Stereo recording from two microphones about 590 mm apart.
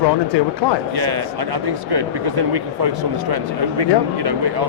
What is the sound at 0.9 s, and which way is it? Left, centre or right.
Speech, right.